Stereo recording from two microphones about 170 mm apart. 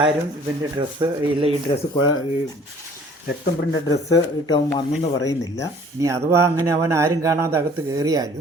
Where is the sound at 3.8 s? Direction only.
20° left (ahead or behind).